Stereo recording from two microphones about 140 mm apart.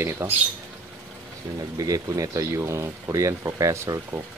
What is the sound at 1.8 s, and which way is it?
Speech, 25° right (ahead or behind).